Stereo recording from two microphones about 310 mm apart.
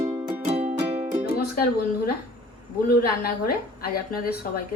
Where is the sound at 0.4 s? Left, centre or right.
Centre.